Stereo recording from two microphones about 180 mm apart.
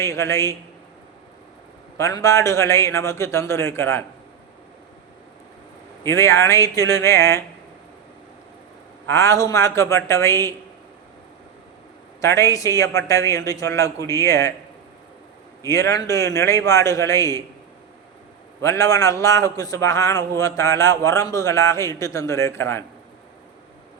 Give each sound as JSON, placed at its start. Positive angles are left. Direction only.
{"t": 0.0, "sound": "speech", "side_deg": 15}
{"t": 2.0, "sound": "speech", "side_deg": 15}
{"t": 6.0, "sound": "speech", "side_deg": 15}
{"t": 9.0, "sound": "speech", "side_deg": 15}
{"t": 12.2, "sound": "speech", "side_deg": 15}
{"t": 15.6, "sound": "speech", "side_deg": 15}
{"t": 18.6, "sound": "speech", "side_deg": 15}